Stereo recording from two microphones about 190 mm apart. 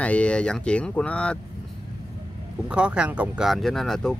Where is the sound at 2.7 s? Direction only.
5° right (ahead or behind).